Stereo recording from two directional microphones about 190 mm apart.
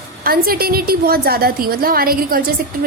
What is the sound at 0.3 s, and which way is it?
A woman's voice, 50° right (ahead or behind).